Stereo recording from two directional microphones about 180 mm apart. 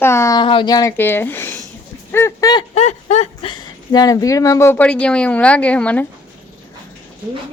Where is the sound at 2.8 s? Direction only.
40° left (ahead or behind); by 6.0 s 5° left (ahead or behind).